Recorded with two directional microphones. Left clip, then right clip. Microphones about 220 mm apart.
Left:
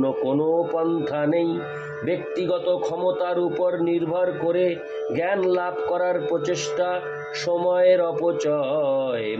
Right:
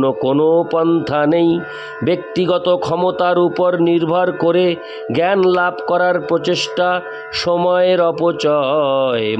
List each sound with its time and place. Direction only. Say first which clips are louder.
0.0 s speech: right 8 dB; 50° right (ahead or behind)